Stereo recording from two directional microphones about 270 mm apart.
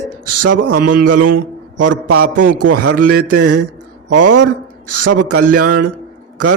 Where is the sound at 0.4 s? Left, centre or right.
Right.